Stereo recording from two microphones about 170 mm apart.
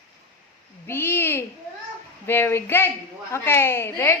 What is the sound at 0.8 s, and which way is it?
A woman's voice, 15° left (ahead or behind).